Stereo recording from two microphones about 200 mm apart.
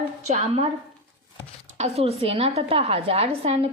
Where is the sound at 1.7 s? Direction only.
30° right (ahead or behind).